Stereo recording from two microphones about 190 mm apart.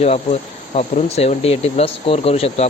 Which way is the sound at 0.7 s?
35° left (ahead or behind).